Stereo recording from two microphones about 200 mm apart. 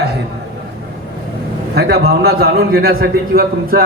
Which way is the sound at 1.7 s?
55° right (ahead or behind).